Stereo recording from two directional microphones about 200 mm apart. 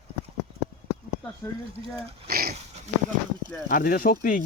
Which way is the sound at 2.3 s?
50° right (ahead or behind).